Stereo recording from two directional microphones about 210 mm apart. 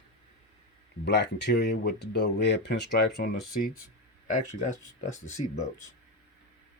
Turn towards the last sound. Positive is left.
turn(degrees=30)  # may be behind; listen again after turning